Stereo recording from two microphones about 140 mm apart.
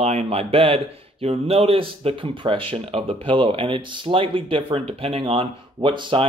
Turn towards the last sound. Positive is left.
turn(degrees=-35)  # may be behind; listen again after turning